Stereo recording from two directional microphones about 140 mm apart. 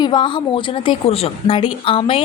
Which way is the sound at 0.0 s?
35° left (ahead or behind).